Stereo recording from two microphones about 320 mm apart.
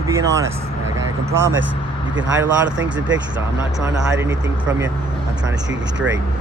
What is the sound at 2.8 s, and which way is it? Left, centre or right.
Speech, right.